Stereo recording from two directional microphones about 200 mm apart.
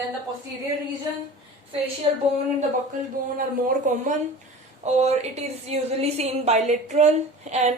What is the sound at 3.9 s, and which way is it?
Speech, 40° right (ahead or behind).